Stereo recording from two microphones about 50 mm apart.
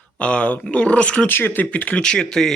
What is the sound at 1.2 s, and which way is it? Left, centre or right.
Speech, left.